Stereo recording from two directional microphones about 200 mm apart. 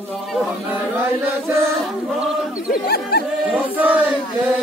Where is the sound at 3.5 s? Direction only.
5° right (ahead or behind).